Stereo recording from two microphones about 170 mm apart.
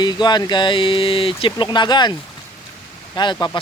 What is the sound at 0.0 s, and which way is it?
Speech, 25° left (ahead or behind).